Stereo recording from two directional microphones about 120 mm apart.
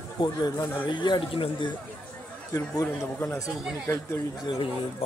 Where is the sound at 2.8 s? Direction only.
20° left (ahead or behind).